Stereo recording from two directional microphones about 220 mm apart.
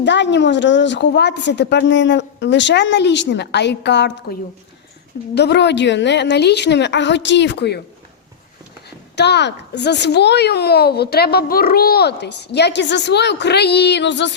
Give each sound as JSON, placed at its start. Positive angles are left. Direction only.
{"t": 0.0, "sound": "speech", "side_deg": 55}
{"t": 9.1, "sound": "speech", "side_deg": 50}